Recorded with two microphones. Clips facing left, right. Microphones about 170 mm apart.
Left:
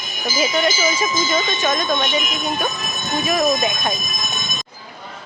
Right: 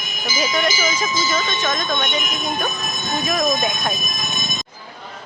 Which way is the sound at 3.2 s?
5° left (ahead or behind).